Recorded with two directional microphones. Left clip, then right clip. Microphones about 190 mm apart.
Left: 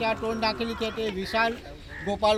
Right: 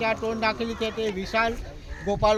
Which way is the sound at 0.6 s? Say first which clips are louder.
Right 1 dB; 40° right (ahead or behind).